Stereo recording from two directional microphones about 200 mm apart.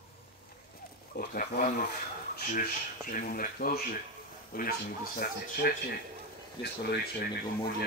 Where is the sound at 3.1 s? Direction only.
45° left (ahead or behind).